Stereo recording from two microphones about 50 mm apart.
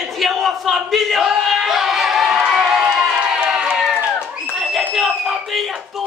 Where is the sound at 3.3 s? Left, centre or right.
Centre.